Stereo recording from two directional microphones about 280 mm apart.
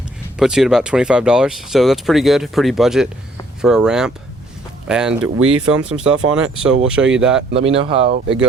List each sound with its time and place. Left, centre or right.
0.3 s speech: centre
7.5 s speech: right
8.0 s speech: right